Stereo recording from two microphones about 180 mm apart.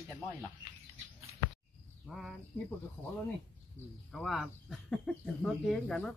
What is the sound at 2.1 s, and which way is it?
Speech, centre (ahead or behind).